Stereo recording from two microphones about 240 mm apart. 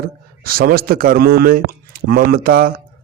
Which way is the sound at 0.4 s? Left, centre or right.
Right.